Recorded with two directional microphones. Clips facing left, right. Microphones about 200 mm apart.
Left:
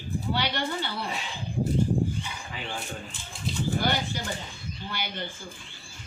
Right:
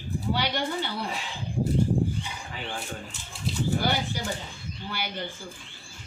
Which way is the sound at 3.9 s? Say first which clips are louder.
Right 1 dB; 10° right (ahead or behind).